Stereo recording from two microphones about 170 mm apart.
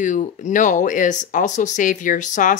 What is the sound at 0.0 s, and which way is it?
Speech, 45° left (ahead or behind).